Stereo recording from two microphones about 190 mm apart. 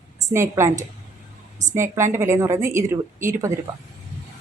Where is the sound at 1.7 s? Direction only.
15° right (ahead or behind).